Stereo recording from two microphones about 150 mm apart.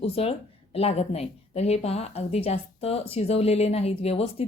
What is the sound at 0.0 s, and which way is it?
A woman's voice, 40° left (ahead or behind).